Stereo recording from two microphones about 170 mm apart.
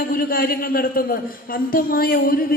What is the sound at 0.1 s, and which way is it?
A man's voice, 60° left (ahead or behind).